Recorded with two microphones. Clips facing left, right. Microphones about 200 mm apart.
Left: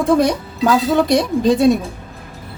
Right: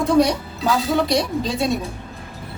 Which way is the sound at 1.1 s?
50° left (ahead or behind).